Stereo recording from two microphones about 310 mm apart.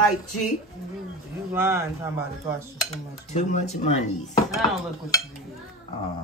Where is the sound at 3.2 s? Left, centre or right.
Left.